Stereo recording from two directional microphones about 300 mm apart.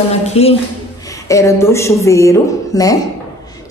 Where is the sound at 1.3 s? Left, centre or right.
Centre.